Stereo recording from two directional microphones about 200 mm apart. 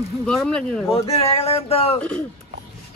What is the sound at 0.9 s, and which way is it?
Speech, 30° left (ahead or behind).